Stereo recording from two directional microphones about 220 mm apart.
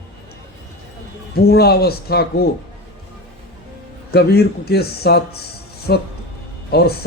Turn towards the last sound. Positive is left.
turn(degrees=45)  # may be behind; listen again after turning